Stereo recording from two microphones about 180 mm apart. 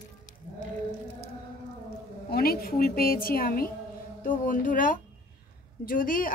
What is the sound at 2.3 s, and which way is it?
A woman's voice, 55° left (ahead or behind).